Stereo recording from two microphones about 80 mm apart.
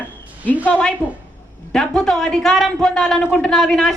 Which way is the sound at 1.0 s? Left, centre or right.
Left.